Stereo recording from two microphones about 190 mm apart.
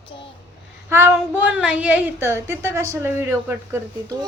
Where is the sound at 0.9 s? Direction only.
15° right (ahead or behind).